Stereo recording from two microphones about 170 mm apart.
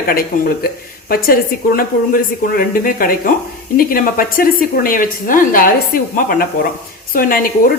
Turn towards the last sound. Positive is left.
turn(degrees=55)  # may be behind; listen again after turning